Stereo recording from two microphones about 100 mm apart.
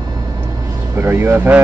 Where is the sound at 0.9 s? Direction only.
25° right (ahead or behind).